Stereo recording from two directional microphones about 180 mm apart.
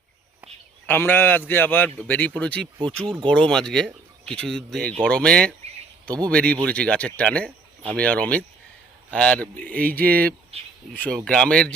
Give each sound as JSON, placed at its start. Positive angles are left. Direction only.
{"t": 0.9, "sound": "speech", "side_deg": 10}